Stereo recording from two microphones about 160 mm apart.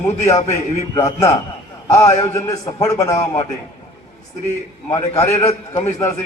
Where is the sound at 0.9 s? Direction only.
20° left (ahead or behind).